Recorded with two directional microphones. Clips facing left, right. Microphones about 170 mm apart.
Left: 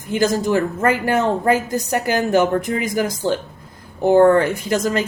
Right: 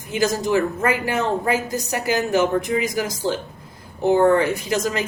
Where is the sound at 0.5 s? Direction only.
50° left (ahead or behind).